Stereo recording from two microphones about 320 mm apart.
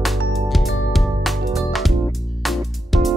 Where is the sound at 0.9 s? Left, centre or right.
Centre.